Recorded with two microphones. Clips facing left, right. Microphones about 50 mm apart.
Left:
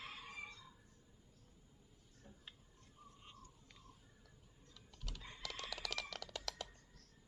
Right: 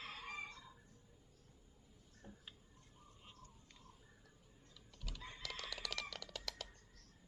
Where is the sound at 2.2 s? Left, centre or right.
Centre.